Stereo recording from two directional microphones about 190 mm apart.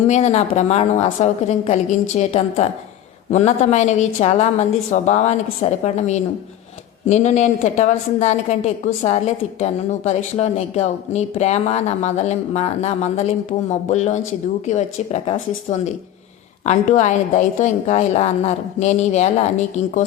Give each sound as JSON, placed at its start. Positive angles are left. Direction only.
{"t": 0.1, "sound": "speech", "side_deg": 35}